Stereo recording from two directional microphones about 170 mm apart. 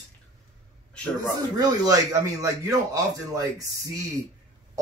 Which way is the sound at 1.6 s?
20° right (ahead or behind).